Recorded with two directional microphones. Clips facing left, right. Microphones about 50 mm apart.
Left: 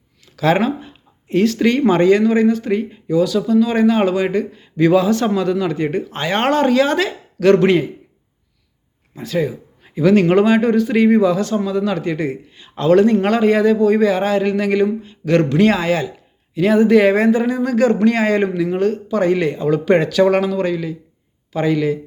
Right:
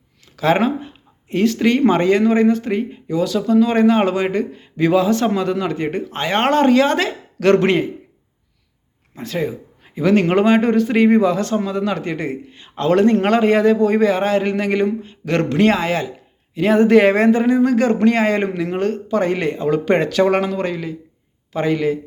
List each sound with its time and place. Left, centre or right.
0.3 s speech: right
2.6 s speech: right
3.1 s a man's voice: right
4.6 s a man's voice: right
9.1 s a man's voice: right
11.5 s a man's voice: right
12.5 s a man's voice: right
16.7 s speech: right
17.4 s a man's voice: right